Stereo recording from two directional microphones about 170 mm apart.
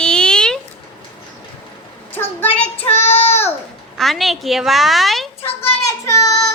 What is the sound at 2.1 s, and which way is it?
Speech, 15° left (ahead or behind).